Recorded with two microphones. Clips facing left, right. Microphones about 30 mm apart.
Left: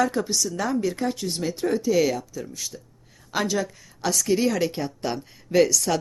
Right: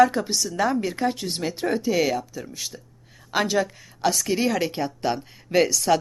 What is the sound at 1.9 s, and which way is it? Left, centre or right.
Speech, centre.